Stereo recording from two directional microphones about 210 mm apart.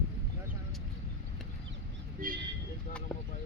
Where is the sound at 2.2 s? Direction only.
40° right (ahead or behind).